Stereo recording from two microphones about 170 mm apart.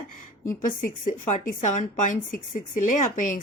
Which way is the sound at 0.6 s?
50° left (ahead or behind).